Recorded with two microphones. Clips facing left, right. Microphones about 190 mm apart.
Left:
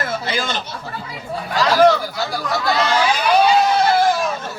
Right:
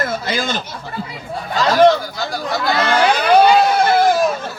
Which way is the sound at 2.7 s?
55° right (ahead or behind).